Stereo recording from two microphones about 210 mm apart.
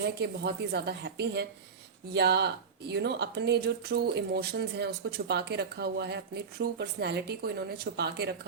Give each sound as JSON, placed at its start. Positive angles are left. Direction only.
{"t": 0.0, "sound": "speech", "side_deg": -50}